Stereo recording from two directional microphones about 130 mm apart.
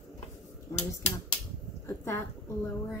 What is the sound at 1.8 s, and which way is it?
Speech, 25° left (ahead or behind).